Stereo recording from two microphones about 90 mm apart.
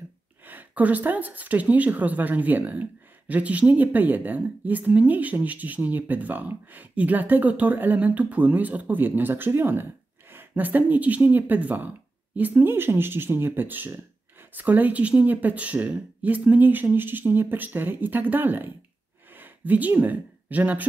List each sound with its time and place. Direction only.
0.5 s speech: 20° right (ahead or behind)